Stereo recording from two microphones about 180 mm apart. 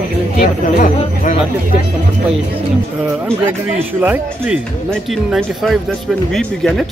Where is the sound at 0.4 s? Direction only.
45° left (ahead or behind).